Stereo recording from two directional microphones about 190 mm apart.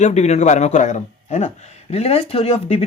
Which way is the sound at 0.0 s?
35° left (ahead or behind).